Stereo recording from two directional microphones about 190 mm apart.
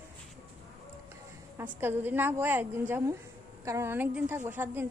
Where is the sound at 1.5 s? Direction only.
10° right (ahead or behind).